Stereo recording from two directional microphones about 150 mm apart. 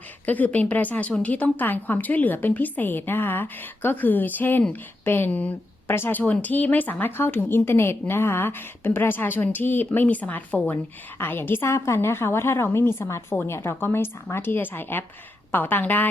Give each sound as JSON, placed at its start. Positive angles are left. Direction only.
{"t": 0.3, "sound": "speech", "side_deg": 10}